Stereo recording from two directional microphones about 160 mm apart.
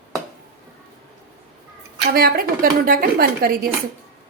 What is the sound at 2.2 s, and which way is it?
A woman's voice, 70° right (ahead or behind).